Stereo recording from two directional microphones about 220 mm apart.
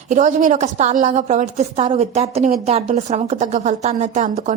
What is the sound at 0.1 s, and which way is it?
A woman's voice, 35° right (ahead or behind).